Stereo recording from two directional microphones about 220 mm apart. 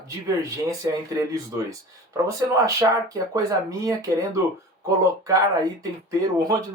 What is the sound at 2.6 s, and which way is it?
Speech, 15° right (ahead or behind).